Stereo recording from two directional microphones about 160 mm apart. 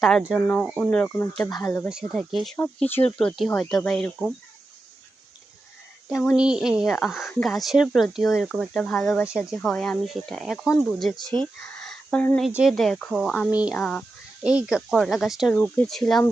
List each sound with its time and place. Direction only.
0.0 s speech: 5° left (ahead or behind)
1.5 s speech: 20° left (ahead or behind)
1.9 s speech: centre (ahead or behind)
2.6 s speech: 10° left (ahead or behind)
3.2 s speech: centre (ahead or behind)
6.1 s speech: centre (ahead or behind)
11.8 s a sound: 5° left (ahead or behind)
12.5 s speech: centre (ahead or behind)
13.7 s speech: 5° left (ahead or behind)